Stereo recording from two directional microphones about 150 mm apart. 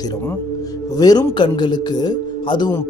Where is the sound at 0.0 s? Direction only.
20° left (ahead or behind).